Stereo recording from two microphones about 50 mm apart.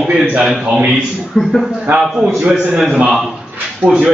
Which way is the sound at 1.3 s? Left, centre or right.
Centre.